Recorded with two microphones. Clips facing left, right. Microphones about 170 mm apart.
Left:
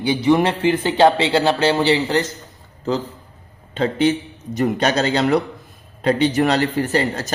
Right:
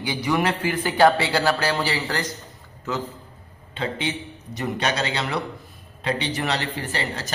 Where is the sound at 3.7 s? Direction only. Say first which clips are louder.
Left 10 dB; 40° left (ahead or behind).